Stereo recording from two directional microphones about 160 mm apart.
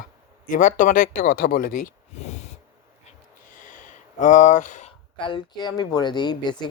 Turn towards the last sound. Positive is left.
turn(degrees=30)  # may be behind; listen again after turning